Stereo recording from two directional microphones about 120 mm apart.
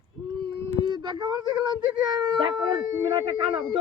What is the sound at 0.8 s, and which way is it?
Speech, 40° right (ahead or behind).